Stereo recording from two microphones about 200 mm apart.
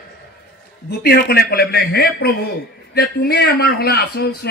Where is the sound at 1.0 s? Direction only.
50° left (ahead or behind).